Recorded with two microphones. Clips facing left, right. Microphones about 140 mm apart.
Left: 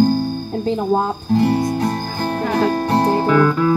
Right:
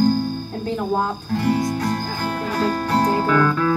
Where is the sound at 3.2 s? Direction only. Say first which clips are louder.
Left 3 dB; 15° left (ahead or behind).